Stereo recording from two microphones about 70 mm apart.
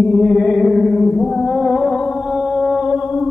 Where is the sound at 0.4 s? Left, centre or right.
Centre.